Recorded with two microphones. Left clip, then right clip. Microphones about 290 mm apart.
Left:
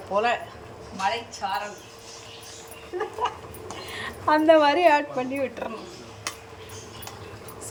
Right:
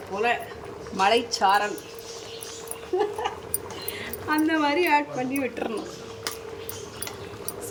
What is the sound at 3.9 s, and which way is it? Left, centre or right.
A woman's voice, centre.